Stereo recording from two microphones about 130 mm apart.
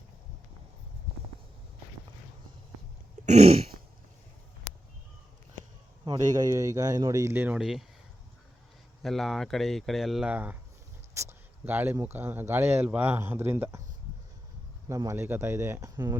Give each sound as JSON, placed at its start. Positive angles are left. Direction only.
{"t": 3.2, "sound": "throat clearing", "side_deg": -70}
{"t": 6.1, "sound": "speech", "side_deg": -30}
{"t": 9.0, "sound": "speech", "side_deg": 0}
{"t": 14.8, "sound": "speech", "side_deg": -20}